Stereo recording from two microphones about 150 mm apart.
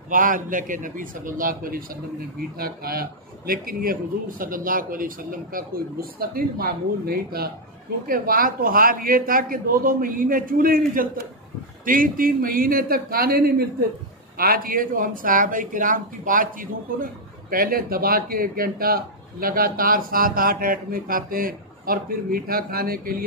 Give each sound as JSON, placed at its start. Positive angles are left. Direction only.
{"t": 0.1, "sound": "speech", "side_deg": -65}
{"t": 2.6, "sound": "speech", "side_deg": -80}
{"t": 8.1, "sound": "speech", "side_deg": -70}
{"t": 14.3, "sound": "speech", "side_deg": -75}